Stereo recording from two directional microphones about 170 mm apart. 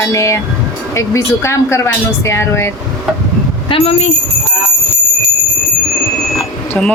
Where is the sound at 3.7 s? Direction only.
40° left (ahead or behind).